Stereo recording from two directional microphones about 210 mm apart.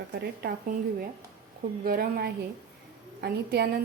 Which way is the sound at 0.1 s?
50° right (ahead or behind).